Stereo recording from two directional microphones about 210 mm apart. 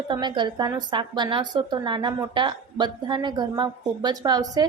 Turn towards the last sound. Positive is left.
turn(degrees=-15)  # may be behind; listen again after turning